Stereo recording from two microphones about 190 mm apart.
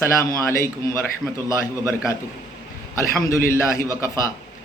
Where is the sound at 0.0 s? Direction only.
15° left (ahead or behind).